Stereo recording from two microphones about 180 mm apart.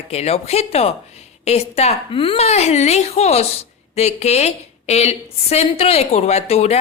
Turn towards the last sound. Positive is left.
turn(degrees=35)  # may be behind; listen again after turning